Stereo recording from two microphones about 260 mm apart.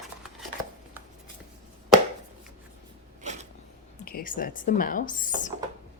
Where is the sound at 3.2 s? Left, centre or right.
Right.